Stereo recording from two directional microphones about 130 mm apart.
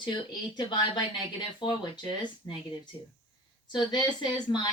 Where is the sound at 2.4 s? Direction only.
20° left (ahead or behind).